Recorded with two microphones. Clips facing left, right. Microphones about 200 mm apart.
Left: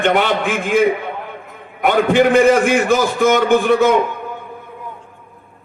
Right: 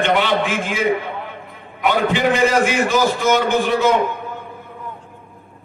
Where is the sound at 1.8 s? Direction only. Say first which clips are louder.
Left 4 dB; 50° left (ahead or behind).